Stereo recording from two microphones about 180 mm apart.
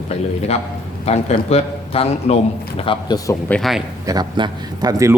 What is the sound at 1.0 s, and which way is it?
Speech, 35° left (ahead or behind).